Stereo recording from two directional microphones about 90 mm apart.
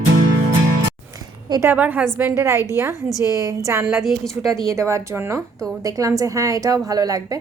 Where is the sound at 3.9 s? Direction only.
Centre (ahead or behind).